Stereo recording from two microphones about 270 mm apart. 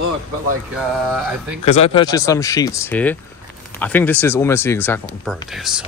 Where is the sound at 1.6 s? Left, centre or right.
Left.